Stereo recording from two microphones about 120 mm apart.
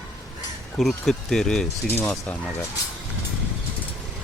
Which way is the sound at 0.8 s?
Centre (ahead or behind).